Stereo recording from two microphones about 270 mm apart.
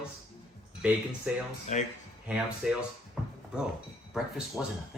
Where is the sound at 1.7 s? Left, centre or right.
Left.